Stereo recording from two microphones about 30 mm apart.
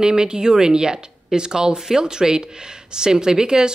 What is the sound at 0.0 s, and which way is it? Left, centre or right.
Speech, right.